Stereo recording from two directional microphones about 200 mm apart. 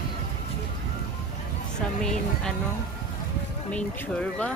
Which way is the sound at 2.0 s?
5° left (ahead or behind).